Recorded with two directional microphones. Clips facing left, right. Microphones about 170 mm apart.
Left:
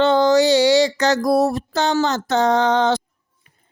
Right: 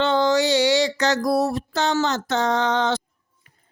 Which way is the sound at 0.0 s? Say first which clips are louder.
Left 5 dB; 40° left (ahead or behind).